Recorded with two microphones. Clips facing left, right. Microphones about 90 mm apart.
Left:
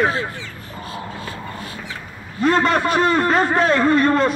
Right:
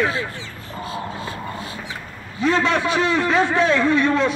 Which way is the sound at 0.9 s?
20° right (ahead or behind).